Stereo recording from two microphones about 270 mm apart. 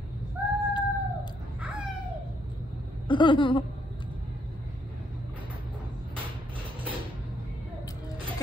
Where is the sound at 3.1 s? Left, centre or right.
Centre.